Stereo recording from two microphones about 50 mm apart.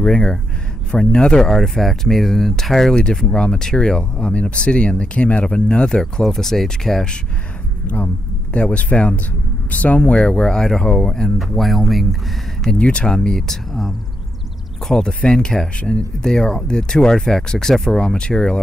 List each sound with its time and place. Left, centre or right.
0.0 s speech: centre
3.0 s speech: centre
7.8 s speech: left; by 12.2 s centre
12.7 s speech: left